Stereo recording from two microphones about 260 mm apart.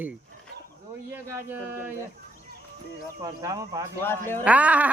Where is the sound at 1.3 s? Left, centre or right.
Centre.